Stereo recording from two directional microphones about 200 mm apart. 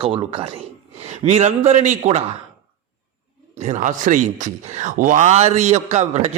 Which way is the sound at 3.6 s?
40° right (ahead or behind).